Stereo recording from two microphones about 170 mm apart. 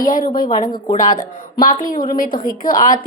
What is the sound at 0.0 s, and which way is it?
A woman's voice, 55° left (ahead or behind).